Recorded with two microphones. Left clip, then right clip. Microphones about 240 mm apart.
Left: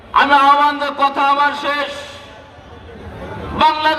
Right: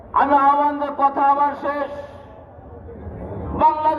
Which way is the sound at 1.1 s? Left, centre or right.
Left.